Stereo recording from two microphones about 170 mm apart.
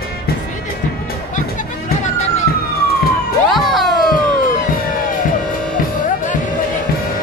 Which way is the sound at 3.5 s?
Centre (ahead or behind).